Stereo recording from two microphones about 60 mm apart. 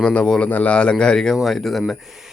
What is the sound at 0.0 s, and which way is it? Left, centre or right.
A man's voice, centre.